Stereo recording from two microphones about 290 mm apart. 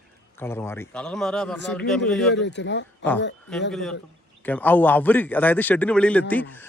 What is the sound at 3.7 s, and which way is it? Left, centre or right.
A man's voice, centre.